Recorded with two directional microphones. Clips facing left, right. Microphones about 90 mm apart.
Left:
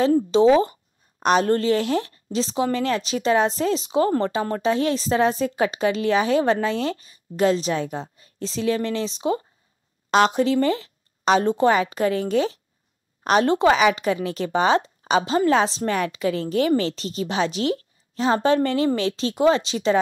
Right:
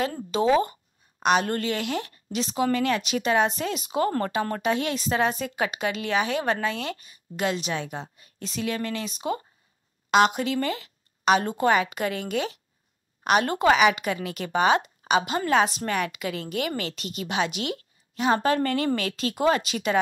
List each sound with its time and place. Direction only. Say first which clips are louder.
0.0 s a woman's voice: left 8 dB; 30° left (ahead or behind)